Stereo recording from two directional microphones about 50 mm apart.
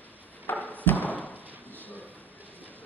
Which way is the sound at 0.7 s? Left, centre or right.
Left.